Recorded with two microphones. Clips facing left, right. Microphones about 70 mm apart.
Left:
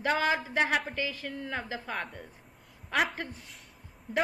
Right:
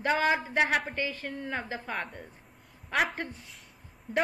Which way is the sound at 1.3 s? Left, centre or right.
Centre.